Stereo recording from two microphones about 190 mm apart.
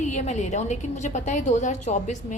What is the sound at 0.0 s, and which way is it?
A woman's voice, 40° left (ahead or behind).